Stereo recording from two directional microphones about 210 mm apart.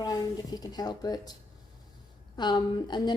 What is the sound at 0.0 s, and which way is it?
Speech, 20° left (ahead or behind).